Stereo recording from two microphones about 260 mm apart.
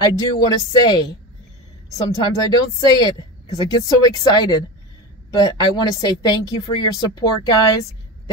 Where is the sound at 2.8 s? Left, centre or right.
Centre.